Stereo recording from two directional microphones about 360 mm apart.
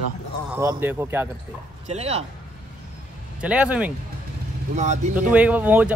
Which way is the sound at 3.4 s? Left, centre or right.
Centre.